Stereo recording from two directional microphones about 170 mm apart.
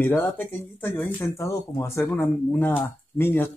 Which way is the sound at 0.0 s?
10° left (ahead or behind).